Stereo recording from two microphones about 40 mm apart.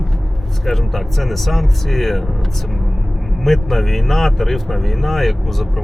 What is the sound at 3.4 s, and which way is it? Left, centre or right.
Speech, centre.